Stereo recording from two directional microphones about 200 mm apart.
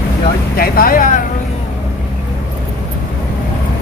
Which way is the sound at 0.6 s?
45° left (ahead or behind).